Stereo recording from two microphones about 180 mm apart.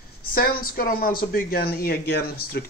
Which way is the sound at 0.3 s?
55° left (ahead or behind).